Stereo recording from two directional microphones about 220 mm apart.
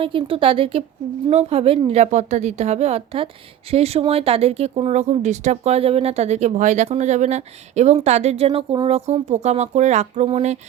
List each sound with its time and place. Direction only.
0.0 s speech: 25° right (ahead or behind)